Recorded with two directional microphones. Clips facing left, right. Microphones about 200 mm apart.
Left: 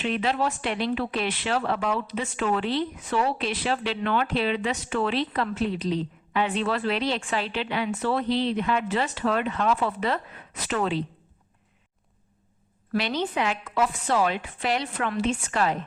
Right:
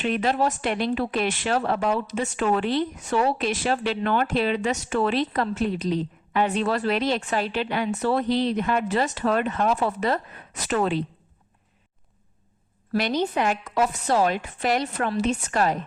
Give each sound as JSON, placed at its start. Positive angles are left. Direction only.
{"t": 0.0, "sound": "speech", "side_deg": -45}
{"t": 12.9, "sound": "speech", "side_deg": -45}